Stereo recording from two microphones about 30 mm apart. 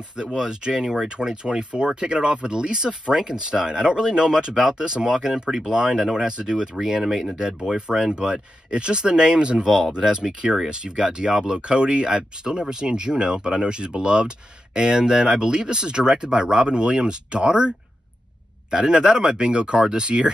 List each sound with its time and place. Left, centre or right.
0.1 s speech: right
6.8 s speech: centre
11.6 s speech: right